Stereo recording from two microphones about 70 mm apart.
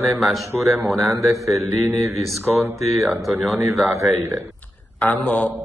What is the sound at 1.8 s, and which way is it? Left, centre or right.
Speech, right.